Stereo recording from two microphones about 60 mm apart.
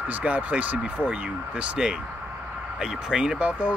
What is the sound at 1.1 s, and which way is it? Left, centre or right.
Speech, centre.